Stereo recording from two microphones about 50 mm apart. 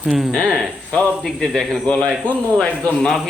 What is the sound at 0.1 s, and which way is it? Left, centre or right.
Speech, centre.